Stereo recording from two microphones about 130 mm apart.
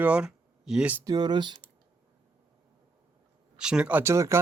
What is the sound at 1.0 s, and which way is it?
Speech, 30° right (ahead or behind).